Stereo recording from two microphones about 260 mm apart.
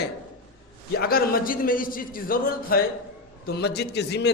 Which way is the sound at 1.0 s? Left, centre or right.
Left.